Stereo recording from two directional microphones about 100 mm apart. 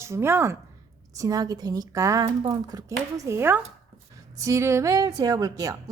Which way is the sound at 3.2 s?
25° right (ahead or behind).